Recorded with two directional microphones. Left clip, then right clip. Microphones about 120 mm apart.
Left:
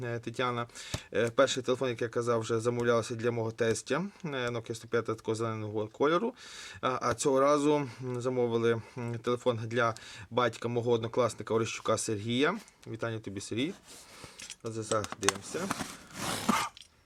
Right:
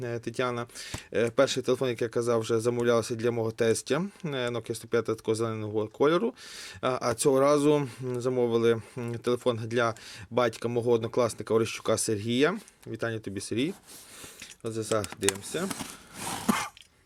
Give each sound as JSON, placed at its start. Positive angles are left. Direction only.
{"t": 0.0, "sound": "speech", "side_deg": -20}